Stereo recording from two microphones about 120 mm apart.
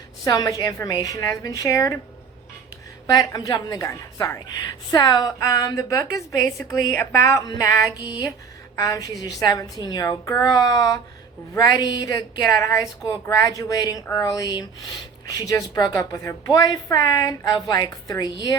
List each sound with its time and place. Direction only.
0.3 s a woman's voice: 30° left (ahead or behind)
3.1 s a woman's voice: 35° left (ahead or behind)